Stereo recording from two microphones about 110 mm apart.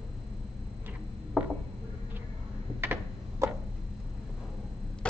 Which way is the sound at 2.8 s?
20° right (ahead or behind).